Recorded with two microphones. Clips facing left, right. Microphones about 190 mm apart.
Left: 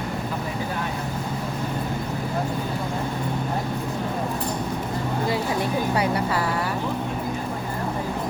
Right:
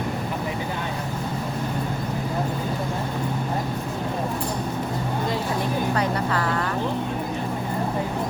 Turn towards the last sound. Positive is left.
turn(degrees=10)  # may be behind; listen again after turning